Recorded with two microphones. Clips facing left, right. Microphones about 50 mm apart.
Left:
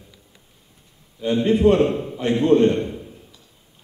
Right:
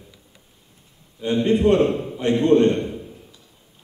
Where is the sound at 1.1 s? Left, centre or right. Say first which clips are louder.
Even; centre.